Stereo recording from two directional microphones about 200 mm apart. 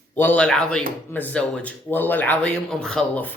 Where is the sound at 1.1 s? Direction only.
5° left (ahead or behind).